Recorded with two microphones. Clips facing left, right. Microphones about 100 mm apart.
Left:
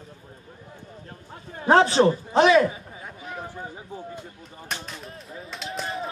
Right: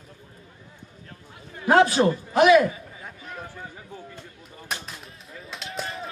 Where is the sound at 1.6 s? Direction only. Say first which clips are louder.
Left 1 dB; 30° left (ahead or behind).